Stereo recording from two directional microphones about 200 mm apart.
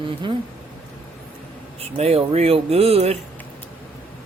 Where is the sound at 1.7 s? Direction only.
30° right (ahead or behind).